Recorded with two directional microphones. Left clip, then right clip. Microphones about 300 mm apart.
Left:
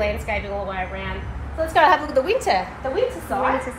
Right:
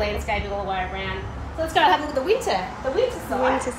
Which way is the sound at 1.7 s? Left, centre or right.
Centre.